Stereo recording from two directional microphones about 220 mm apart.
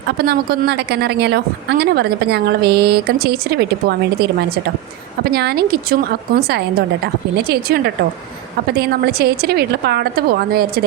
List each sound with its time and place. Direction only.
0.2 s a woman's voice: 45° right (ahead or behind)